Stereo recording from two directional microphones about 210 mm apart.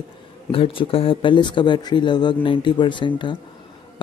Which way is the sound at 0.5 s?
25° left (ahead or behind).